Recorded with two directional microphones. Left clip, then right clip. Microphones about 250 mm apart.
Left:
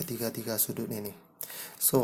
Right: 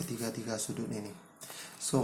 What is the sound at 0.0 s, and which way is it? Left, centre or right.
Speech, left.